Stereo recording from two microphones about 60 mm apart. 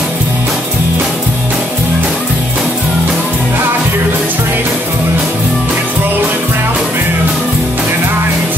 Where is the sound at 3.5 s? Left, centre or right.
Right.